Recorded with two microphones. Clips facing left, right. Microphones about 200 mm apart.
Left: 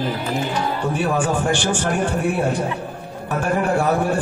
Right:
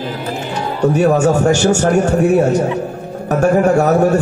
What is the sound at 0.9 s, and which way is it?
A man's voice, 45° right (ahead or behind).